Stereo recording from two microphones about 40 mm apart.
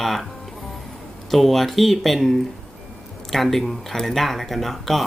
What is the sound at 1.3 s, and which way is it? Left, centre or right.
Speech, centre.